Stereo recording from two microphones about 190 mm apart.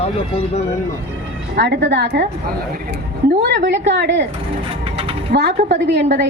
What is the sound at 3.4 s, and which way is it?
Speech, 65° right (ahead or behind).